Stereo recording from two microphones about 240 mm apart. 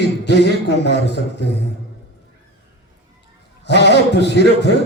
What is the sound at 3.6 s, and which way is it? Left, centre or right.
Speech, left.